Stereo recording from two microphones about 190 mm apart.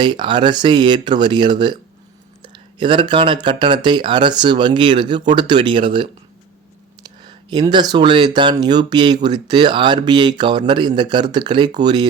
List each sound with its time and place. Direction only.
0.0 s speech: 25° right (ahead or behind)